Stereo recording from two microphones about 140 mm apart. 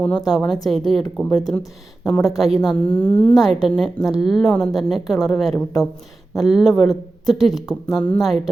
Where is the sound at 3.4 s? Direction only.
Centre (ahead or behind).